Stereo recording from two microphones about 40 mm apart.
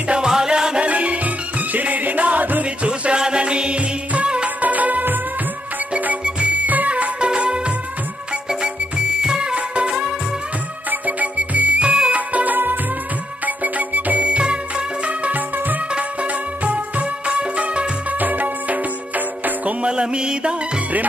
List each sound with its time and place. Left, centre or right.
0.2 s music: centre
0.8 s music: right
2.6 s music: right
4.6 s music: right
6.2 s music: right
7.2 s music: right
10.9 s music: right
14.2 s music: right
15.3 s music: right
15.9 s music: right
18.2 s music: right
19.8 s music: right